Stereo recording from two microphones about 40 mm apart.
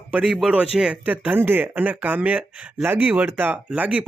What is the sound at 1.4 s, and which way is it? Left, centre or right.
Speech, right.